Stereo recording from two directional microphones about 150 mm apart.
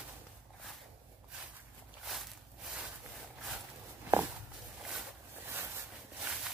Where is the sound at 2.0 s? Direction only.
Centre (ahead or behind).